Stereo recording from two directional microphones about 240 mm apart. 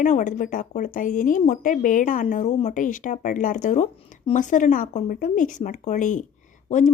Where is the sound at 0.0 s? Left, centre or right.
Left.